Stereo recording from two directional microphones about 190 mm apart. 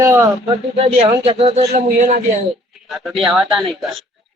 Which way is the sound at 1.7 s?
50° right (ahead or behind).